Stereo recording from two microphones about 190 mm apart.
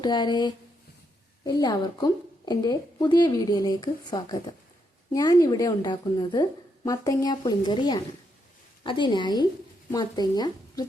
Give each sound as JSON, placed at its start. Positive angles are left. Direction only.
{"t": 0.0, "sound": "a woman's voice", "side_deg": 20}